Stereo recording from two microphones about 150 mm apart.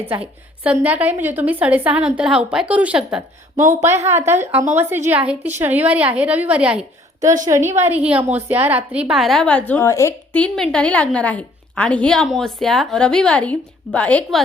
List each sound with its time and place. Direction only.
0.1 s a woman's voice: 10° right (ahead or behind)
3.6 s speech: 60° right (ahead or behind)
4.0 s a woman's voice: 15° right (ahead or behind)
7.2 s a woman's voice: 20° right (ahead or behind); by 10.4 s 20° left (ahead or behind)
10.4 s a woman's voice: 5° left (ahead or behind)